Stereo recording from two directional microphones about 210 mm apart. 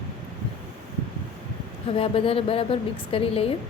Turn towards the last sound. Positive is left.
turn(degrees=25)  # may be behind; listen again after turning